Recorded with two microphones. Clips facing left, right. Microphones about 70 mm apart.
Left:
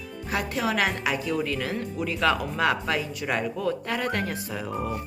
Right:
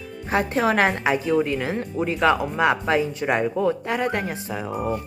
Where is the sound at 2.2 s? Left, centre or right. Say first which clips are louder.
Right 4 dB; centre.